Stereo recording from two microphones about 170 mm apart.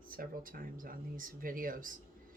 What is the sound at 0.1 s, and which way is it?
Speech, 55° right (ahead or behind).